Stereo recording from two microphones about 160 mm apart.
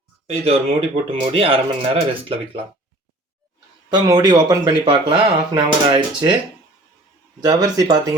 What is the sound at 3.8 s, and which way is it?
Speech, 25° right (ahead or behind).